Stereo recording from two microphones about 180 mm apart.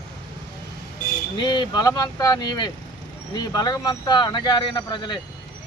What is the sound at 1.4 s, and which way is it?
Speech, 25° left (ahead or behind).